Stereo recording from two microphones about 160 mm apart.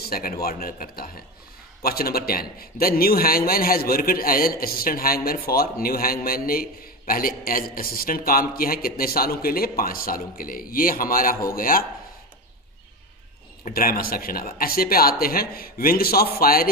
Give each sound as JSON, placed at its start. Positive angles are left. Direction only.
{"t": 0.0, "sound": "a man's voice", "side_deg": 70}
{"t": 13.7, "sound": "a man's voice", "side_deg": 65}